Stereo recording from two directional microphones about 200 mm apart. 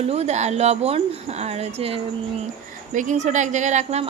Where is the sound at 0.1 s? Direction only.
35° right (ahead or behind).